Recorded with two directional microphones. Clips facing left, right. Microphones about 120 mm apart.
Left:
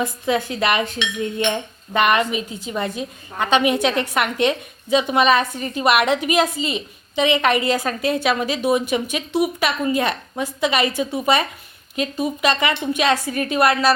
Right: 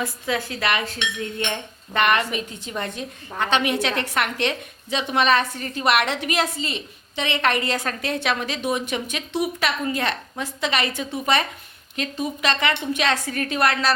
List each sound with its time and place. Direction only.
0.0 s a woman's voice: 20° left (ahead or behind)